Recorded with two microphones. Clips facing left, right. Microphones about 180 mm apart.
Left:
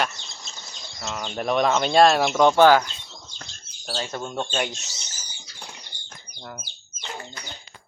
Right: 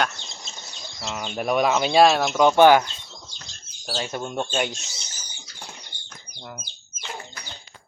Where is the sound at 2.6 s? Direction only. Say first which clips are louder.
Right 2 dB; 20° right (ahead or behind).